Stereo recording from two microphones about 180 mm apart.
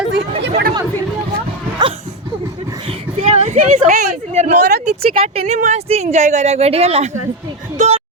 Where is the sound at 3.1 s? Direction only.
35° right (ahead or behind).